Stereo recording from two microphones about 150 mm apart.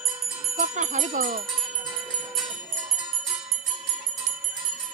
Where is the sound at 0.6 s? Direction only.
55° right (ahead or behind).